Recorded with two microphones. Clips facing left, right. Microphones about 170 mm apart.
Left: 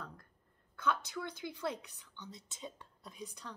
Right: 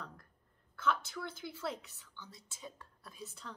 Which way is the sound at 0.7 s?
15° left (ahead or behind).